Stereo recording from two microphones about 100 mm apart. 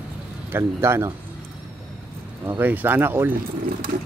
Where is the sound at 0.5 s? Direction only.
25° right (ahead or behind).